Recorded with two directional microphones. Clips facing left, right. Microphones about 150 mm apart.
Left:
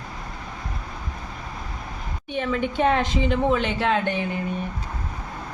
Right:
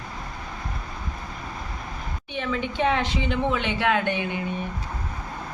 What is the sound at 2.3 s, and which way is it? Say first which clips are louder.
A woman's voice: left 4 dB; 45° left (ahead or behind).